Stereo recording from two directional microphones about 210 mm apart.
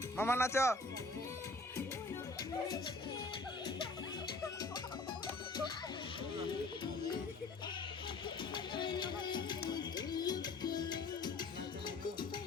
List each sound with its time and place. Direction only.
0.2 s speech: 10° left (ahead or behind)
8.5 s music: 20° left (ahead or behind)